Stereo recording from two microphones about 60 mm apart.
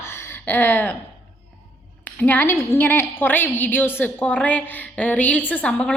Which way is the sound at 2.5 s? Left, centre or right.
Left.